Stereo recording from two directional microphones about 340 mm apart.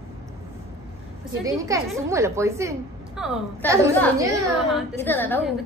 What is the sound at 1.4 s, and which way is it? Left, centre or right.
A woman's voice, centre.